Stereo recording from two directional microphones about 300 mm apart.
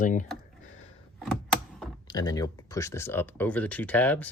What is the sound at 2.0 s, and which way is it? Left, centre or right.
Speech, centre.